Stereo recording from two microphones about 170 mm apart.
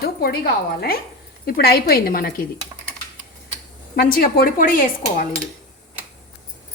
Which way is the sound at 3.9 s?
65° left (ahead or behind).